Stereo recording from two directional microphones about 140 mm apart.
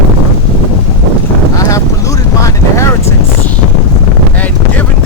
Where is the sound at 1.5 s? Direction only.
25° left (ahead or behind).